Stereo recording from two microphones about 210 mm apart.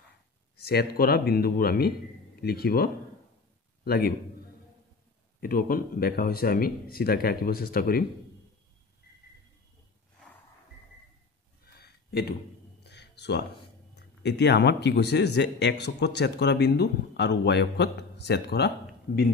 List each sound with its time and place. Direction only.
0.6 s a man's voice: 50° left (ahead or behind)
5.4 s speech: 45° left (ahead or behind)
11.6 s a sound: 50° left (ahead or behind)
13.9 s speech: 55° left (ahead or behind)